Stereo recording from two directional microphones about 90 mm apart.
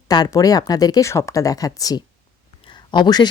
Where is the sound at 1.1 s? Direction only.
35° left (ahead or behind).